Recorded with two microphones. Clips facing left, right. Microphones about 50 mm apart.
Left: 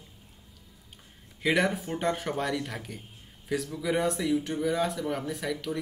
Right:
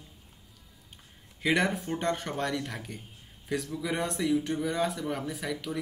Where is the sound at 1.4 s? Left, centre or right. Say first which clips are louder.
Left 1 dB; centre.